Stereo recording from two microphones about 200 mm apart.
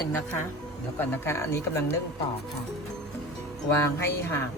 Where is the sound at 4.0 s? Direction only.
15° left (ahead or behind).